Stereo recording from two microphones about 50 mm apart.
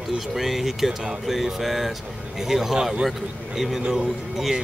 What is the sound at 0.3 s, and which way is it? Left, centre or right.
Speech, centre.